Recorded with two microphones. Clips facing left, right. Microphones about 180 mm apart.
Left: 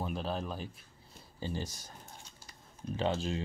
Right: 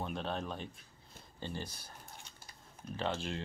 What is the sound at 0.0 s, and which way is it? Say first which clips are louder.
Speech: left 2 dB; 5° left (ahead or behind).